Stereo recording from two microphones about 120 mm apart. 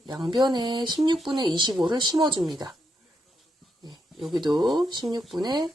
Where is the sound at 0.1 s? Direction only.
40° right (ahead or behind).